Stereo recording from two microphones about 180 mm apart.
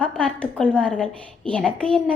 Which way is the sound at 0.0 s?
5° left (ahead or behind).